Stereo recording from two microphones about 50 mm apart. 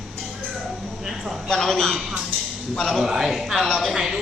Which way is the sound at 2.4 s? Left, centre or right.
Centre.